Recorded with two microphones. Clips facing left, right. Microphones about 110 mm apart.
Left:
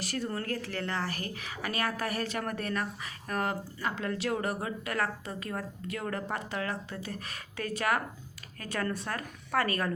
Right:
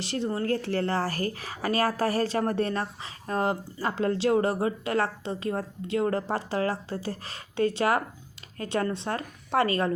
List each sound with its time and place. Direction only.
0.0 s speech: 25° right (ahead or behind)